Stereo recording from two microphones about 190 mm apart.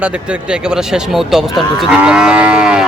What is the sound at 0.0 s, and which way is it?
Speech, 5° right (ahead or behind).